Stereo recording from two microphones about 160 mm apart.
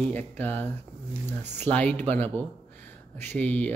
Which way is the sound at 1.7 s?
10° left (ahead or behind).